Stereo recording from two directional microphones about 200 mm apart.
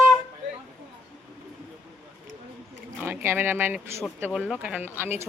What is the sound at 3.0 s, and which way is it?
Speech, 10° right (ahead or behind).